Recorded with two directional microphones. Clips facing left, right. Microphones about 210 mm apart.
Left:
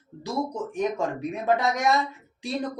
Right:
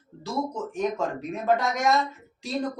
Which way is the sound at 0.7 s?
15° left (ahead or behind).